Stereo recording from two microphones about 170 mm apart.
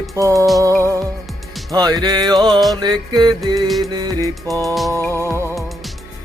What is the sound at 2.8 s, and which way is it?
Music, 25° right (ahead or behind).